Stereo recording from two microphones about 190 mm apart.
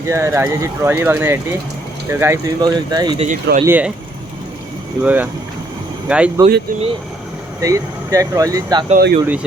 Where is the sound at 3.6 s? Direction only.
10° right (ahead or behind).